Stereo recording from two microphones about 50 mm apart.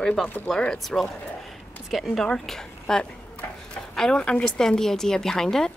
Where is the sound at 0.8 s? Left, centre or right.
Centre.